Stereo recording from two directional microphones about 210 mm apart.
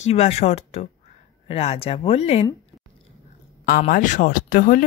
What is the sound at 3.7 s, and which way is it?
Speech, 40° left (ahead or behind).